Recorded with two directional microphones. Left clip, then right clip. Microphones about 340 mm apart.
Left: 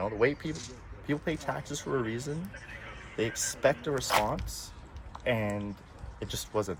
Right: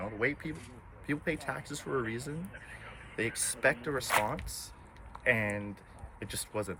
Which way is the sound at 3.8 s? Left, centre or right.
Centre.